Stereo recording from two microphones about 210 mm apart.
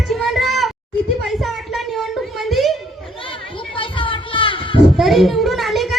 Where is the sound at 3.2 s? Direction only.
25° left (ahead or behind).